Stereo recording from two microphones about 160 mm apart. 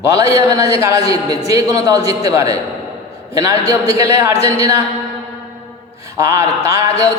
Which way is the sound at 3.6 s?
40° left (ahead or behind).